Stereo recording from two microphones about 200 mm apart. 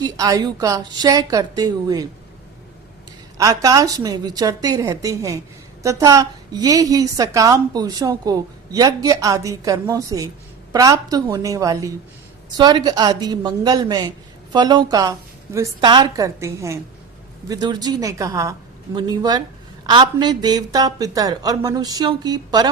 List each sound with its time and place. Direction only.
0.0 s a woman's voice: 20° right (ahead or behind)
3.3 s a woman's voice: 15° right (ahead or behind)